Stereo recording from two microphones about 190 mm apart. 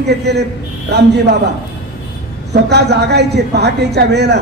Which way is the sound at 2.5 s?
60° right (ahead or behind).